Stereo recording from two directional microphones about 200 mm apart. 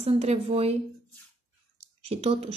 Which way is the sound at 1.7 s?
30° right (ahead or behind).